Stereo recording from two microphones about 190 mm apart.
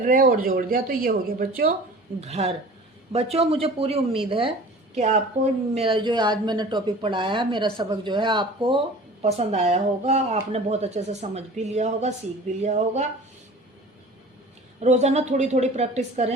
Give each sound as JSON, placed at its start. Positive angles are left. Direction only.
{"t": 0.0, "sound": "speech", "side_deg": -45}
{"t": 2.2, "sound": "a woman's voice", "side_deg": -35}
{"t": 14.8, "sound": "speech", "side_deg": -35}